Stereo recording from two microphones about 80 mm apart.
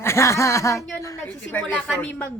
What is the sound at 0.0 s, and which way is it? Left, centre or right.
Speech, left.